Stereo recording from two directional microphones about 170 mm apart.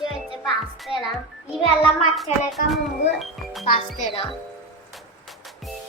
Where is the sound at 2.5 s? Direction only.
Centre (ahead or behind).